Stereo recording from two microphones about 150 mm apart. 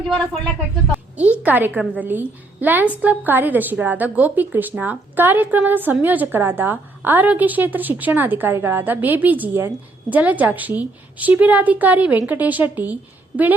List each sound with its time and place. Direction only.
1.1 s a woman's voice: 10° right (ahead or behind)